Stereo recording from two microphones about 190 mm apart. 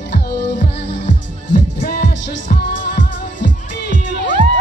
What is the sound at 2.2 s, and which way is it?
Music, 60° left (ahead or behind).